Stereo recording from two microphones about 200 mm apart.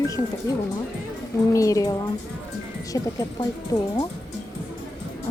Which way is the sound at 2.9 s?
15° left (ahead or behind).